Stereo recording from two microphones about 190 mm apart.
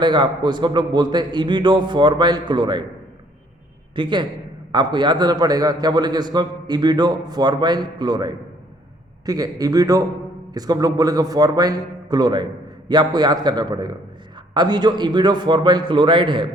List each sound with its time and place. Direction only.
0.0 s a man's voice: 25° right (ahead or behind)
3.9 s a man's voice: 25° right (ahead or behind)